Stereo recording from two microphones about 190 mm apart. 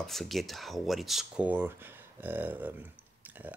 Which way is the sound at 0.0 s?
Centre (ahead or behind).